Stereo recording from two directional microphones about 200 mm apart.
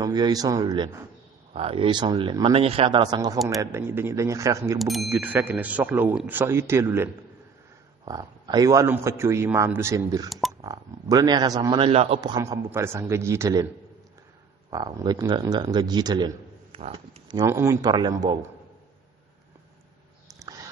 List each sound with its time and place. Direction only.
0.0 s a man's voice: 20° right (ahead or behind)
4.7 s a man's voice: centre (ahead or behind); by 13.7 s 15° right (ahead or behind)
14.7 s a man's voice: 20° right (ahead or behind)
20.3 s a sound: 15° right (ahead or behind)